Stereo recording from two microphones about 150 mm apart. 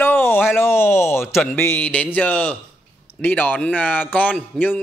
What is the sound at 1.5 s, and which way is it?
A man's voice, 15° left (ahead or behind).